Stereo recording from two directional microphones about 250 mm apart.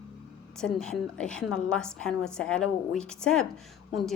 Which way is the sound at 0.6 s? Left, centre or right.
Centre.